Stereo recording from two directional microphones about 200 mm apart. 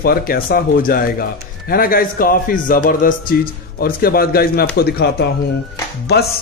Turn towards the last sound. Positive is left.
turn(degrees=55)  # may be behind; listen again after turning